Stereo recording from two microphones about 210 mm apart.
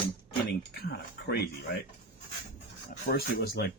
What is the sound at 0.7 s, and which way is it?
Speech, 50° left (ahead or behind).